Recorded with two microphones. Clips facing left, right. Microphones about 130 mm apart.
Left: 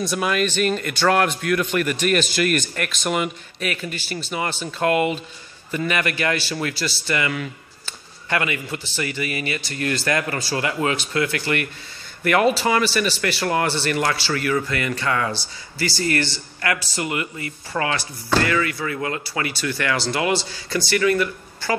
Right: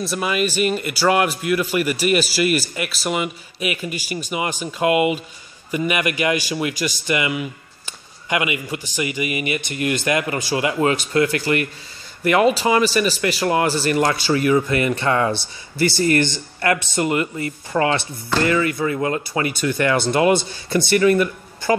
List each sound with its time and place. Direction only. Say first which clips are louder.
0.0 s a man's voice: even; centre (ahead or behind); by 10.8 s 20° right (ahead or behind)
10.8 s speech: right 6 dB; 35° right (ahead or behind)
12.7 s a man's voice: right 3 dB; 15° right (ahead or behind)
13.7 s speech: right 4 dB; 35° right (ahead or behind)
14.1 s speech: right 5 dB; 20° right (ahead or behind)